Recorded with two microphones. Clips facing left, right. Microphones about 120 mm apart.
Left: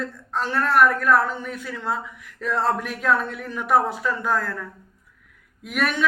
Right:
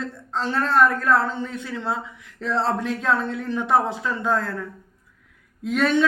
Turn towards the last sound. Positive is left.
turn(degrees=-25)  # may be behind; listen again after turning